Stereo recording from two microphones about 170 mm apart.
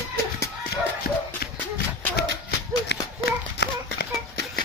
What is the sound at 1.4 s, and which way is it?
Horse, 65° left (ahead or behind).